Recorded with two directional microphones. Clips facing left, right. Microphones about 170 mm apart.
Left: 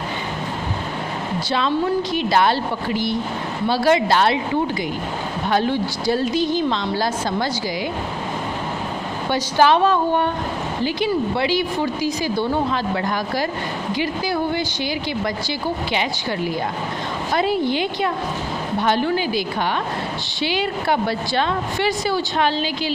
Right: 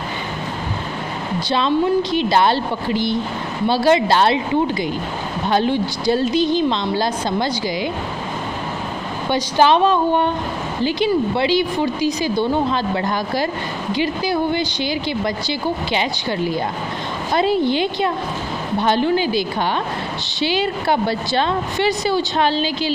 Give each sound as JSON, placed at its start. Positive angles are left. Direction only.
{"t": 2.1, "sound": "a woman's voice", "side_deg": -25}
{"t": 5.5, "sound": "a woman's voice", "side_deg": -25}
{"t": 9.3, "sound": "a woman's voice", "side_deg": -20}
{"t": 15.9, "sound": "a woman's voice", "side_deg": -30}